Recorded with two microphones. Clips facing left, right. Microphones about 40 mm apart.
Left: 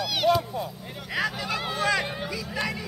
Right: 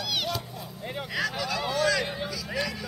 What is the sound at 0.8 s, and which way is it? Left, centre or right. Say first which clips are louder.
Vehicle: right 5 dB; right.